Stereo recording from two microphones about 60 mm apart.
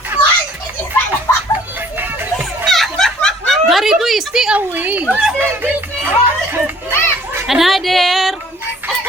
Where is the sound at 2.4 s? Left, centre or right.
Centre.